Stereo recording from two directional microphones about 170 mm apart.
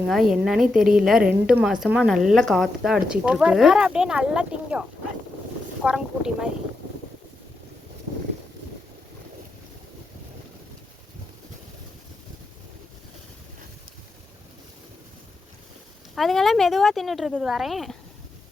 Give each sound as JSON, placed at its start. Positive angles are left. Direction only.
{"t": 0.1, "sound": "a woman's voice", "side_deg": 0}
{"t": 16.1, "sound": "a woman's voice", "side_deg": 0}